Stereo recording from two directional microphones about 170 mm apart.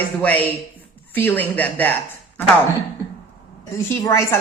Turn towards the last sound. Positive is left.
turn(degrees=15)  # may be behind; listen again after turning